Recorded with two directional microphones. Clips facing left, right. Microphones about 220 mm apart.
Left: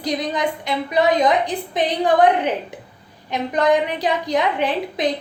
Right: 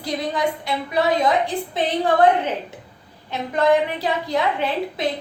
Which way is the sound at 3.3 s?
15° left (ahead or behind).